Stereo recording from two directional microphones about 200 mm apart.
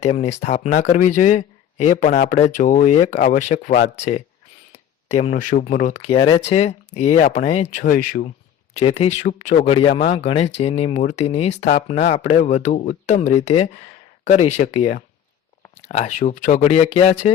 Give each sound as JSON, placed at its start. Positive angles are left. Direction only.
{"t": 0.0, "sound": "speech", "side_deg": 35}
{"t": 5.1, "sound": "speech", "side_deg": 35}
{"t": 6.1, "sound": "speech", "side_deg": 25}
{"t": 8.7, "sound": "speech", "side_deg": 30}